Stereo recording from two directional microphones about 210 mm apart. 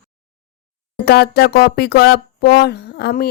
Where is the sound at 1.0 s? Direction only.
50° left (ahead or behind).